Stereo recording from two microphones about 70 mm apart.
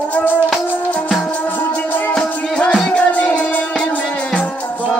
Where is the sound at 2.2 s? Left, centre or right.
Centre.